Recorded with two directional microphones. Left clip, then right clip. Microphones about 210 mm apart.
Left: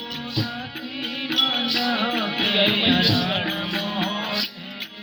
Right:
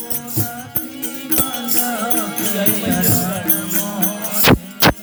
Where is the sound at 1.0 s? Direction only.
55° right (ahead or behind).